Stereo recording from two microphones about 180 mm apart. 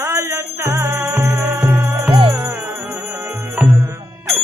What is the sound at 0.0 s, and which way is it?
Music, 15° right (ahead or behind).